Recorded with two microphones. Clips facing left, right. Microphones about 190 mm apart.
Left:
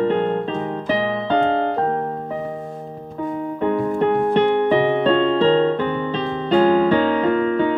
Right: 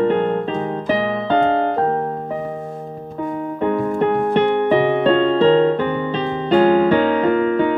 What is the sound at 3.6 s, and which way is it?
Music, 55° right (ahead or behind).